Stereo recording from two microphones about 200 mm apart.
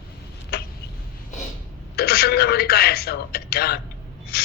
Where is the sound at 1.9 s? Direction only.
50° left (ahead or behind).